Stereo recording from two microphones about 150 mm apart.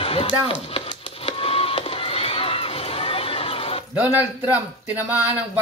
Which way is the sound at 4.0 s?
10° right (ahead or behind).